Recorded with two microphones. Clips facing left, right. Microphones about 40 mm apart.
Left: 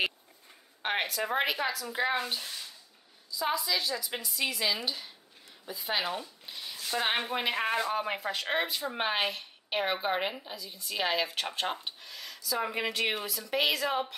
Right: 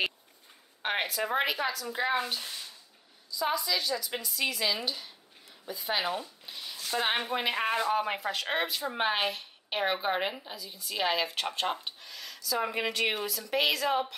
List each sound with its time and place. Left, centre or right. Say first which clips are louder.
0.8 s speech: even; centre
6.4 s a sound: even; centre
6.9 s speech: right 1 dB; centre